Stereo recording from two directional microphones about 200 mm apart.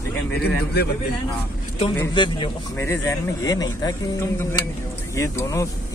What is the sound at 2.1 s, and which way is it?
Speech, 25° left (ahead or behind).